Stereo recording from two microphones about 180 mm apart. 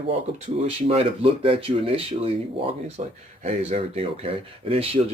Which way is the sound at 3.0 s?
40° right (ahead or behind).